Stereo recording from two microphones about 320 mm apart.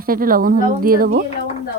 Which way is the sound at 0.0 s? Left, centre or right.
Right.